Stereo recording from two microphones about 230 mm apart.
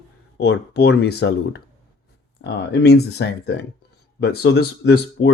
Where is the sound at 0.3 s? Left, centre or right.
Left.